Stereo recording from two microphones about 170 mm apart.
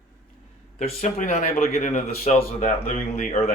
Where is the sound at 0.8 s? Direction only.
40° left (ahead or behind).